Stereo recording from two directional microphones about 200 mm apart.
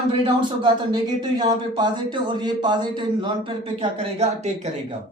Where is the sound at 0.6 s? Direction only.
20° right (ahead or behind).